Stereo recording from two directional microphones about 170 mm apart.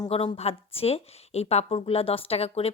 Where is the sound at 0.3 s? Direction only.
35° left (ahead or behind).